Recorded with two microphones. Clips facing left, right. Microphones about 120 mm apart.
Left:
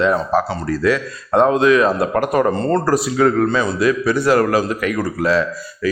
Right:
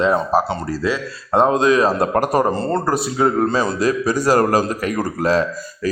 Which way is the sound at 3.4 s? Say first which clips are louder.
Left 1 dB; 45° right (ahead or behind).